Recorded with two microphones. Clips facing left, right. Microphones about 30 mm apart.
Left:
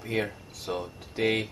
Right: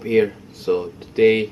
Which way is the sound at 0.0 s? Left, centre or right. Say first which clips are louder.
Right 12 dB; right.